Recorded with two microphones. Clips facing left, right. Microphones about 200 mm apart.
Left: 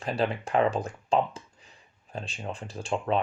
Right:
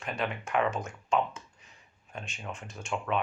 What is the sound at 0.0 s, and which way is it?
Speech, 35° left (ahead or behind).